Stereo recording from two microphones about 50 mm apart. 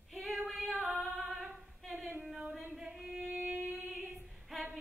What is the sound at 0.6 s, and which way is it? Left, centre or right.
Singing, right.